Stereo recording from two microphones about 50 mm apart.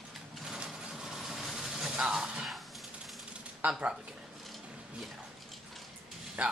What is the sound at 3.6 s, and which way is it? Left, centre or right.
Speech, right.